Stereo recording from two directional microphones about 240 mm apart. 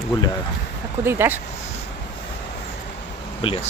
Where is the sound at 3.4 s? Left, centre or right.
Left.